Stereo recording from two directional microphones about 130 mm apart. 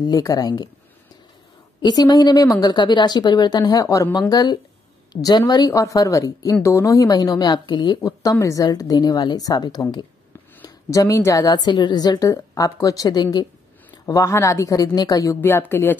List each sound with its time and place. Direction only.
0.0 s speech: 25° left (ahead or behind)
1.8 s a woman's voice: 30° left (ahead or behind); by 16.0 s 15° left (ahead or behind)